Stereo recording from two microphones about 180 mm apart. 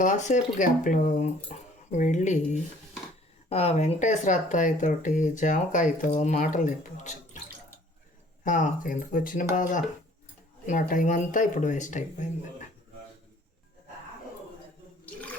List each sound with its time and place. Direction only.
0.0 s speech: 45° left (ahead or behind)
8.4 s speech: 45° left (ahead or behind)